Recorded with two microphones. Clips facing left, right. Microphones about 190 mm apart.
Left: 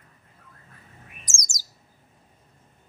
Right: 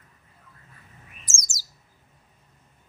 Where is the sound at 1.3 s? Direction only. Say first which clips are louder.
Left 1 dB; 15° left (ahead or behind).